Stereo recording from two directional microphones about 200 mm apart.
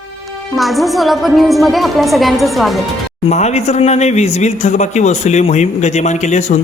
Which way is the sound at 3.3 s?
35° left (ahead or behind).